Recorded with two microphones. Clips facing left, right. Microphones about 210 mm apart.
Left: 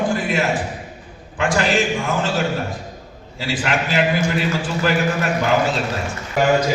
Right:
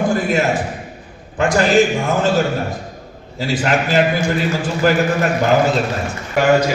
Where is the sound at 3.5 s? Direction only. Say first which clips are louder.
Right 4 dB; 40° right (ahead or behind).